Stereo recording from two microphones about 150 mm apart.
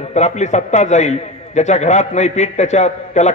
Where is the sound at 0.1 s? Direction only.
50° left (ahead or behind).